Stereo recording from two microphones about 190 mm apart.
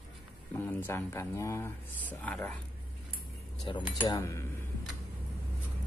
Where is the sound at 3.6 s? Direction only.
20° left (ahead or behind).